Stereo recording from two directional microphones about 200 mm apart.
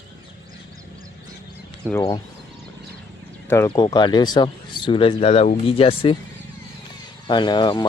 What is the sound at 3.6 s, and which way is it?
Speech, 20° left (ahead or behind).